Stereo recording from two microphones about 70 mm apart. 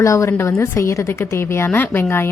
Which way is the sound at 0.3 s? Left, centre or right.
Left.